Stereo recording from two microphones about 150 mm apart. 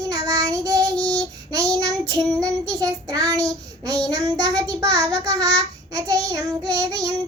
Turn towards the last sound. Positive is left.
turn(degrees=-20)  # may be behind; listen again after turning